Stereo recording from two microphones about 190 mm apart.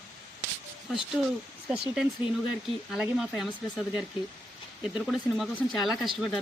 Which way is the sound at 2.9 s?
Centre (ahead or behind).